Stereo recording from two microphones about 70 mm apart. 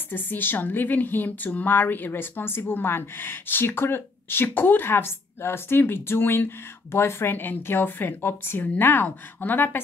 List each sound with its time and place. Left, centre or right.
0.1 s speech: left